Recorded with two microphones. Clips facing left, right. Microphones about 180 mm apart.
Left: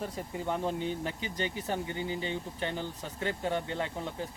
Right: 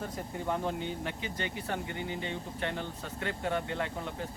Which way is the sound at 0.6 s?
30° left (ahead or behind).